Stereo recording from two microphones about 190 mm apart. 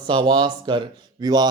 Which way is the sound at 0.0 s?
25° right (ahead or behind).